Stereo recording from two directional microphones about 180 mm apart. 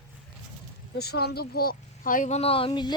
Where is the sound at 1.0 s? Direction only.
60° left (ahead or behind); by 2.9 s 25° left (ahead or behind).